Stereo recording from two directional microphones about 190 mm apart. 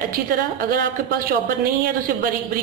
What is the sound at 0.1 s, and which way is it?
Speech, 50° right (ahead or behind).